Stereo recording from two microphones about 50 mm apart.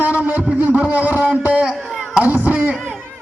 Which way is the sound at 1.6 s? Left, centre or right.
Centre.